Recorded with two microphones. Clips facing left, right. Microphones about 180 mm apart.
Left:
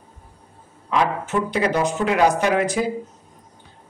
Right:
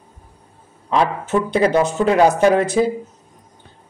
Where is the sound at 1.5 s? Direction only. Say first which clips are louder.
Right 6 dB; 25° right (ahead or behind).